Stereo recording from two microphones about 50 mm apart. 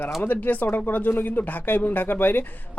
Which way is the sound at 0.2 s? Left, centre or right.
Left.